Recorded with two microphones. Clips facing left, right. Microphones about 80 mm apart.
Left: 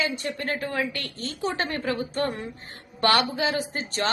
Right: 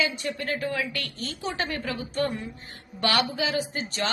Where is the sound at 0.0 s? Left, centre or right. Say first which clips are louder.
Even; left.